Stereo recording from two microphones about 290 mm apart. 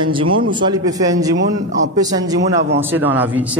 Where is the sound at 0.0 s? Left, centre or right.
Centre.